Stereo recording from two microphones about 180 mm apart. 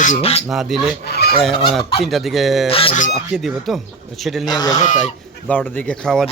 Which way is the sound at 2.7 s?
30° left (ahead or behind).